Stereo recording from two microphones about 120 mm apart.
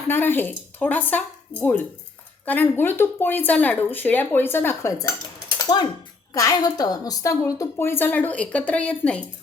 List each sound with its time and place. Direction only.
0.1 s speech: 15° left (ahead or behind)
5.5 s mechanisms: 35° left (ahead or behind)
6.3 s a woman's voice: 30° left (ahead or behind); by 9.2 s 10° left (ahead or behind)